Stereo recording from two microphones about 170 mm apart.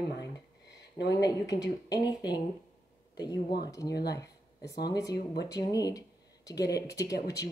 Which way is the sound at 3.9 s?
75° left (ahead or behind).